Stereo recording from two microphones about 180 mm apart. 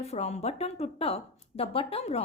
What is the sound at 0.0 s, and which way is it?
A woman's voice, 35° left (ahead or behind).